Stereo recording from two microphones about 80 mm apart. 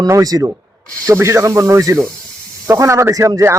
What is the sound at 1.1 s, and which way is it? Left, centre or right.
A man's voice, right.